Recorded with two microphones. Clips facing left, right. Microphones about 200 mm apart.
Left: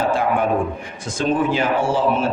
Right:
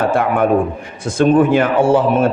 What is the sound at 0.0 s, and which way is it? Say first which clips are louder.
A man's voice: right 4 dB; 60° right (ahead or behind).